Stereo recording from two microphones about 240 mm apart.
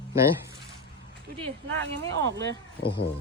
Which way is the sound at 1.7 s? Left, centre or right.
Right.